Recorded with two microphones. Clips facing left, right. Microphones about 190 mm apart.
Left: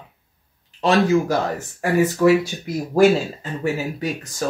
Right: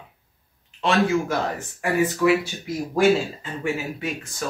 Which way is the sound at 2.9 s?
40° left (ahead or behind).